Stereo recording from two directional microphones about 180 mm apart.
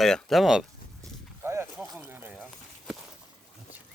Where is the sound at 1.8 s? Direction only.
5° right (ahead or behind).